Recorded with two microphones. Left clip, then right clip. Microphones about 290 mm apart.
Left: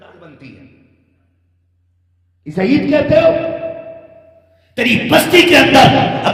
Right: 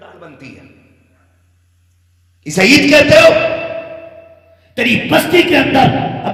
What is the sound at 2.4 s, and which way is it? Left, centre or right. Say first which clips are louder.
Speech: right 6 dB; right.